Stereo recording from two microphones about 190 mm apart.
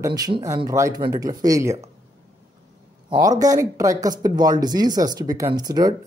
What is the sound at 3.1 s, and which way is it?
Speech, 20° right (ahead or behind).